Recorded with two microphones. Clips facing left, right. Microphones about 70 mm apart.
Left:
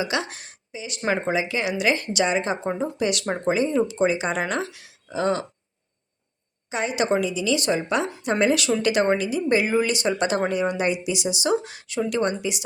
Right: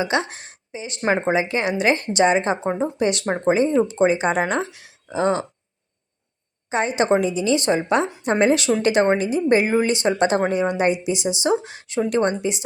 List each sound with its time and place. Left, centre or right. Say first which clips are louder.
0.0 s speech: right 4 dB; right
6.7 s speech: right 4 dB; right